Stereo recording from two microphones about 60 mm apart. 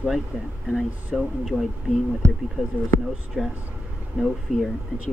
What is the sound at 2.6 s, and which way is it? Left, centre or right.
Speech, right.